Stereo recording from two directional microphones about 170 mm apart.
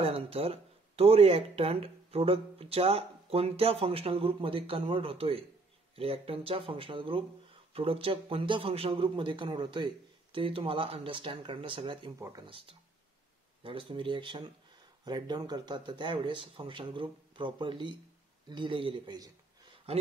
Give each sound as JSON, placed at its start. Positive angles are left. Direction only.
{"t": 0.0, "sound": "speech", "side_deg": -35}
{"t": 12.2, "sound": "speech", "side_deg": -20}